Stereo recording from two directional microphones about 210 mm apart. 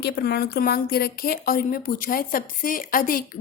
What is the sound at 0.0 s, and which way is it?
A woman's voice, 50° left (ahead or behind).